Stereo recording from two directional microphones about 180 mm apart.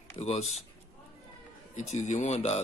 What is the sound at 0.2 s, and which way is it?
Speech, 35° left (ahead or behind).